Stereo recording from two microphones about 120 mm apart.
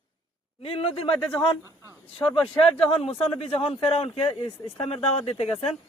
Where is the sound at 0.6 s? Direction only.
50° left (ahead or behind).